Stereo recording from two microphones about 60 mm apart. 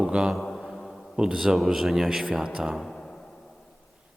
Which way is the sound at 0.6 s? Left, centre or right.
Centre.